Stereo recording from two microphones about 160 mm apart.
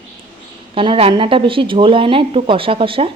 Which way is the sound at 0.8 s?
35° right (ahead or behind).